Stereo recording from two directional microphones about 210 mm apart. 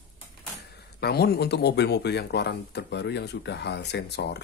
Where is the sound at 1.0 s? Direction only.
50° left (ahead or behind).